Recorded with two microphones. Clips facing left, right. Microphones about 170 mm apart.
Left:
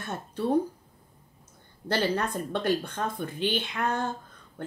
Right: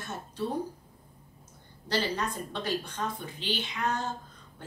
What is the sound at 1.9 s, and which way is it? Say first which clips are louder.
A woman's voice: left 4 dB; 55° left (ahead or behind).